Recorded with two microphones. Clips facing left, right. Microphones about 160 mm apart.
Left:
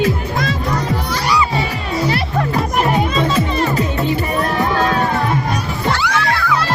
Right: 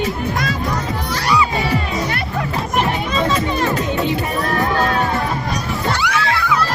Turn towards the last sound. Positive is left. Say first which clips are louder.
# left 1 dB
turn(degrees=-20)  # may be behind; listen again after turning